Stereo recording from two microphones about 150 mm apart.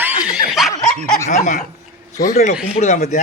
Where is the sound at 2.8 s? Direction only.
50° left (ahead or behind).